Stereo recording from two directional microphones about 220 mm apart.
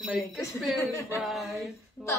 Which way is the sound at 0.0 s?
Centre (ahead or behind).